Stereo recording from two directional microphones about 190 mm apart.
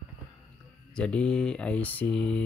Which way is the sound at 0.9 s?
5° left (ahead or behind).